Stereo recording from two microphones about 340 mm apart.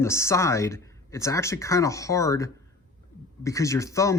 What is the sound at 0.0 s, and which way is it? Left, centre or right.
Speech, centre.